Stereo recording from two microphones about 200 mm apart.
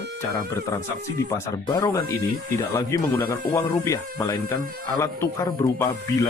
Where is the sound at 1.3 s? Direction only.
15° left (ahead or behind).